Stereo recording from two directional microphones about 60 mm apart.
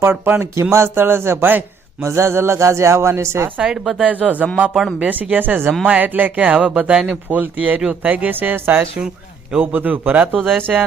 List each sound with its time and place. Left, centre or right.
0.0 s speech: right
2.0 s speech: right
3.6 s speech: centre
4.0 s speech: right
4.7 s speech: centre
4.9 s speech: right
10.7 s speech: centre